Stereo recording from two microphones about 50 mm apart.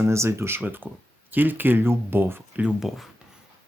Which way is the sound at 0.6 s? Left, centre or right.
Right.